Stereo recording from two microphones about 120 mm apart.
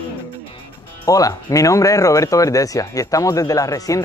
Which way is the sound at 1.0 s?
30° left (ahead or behind).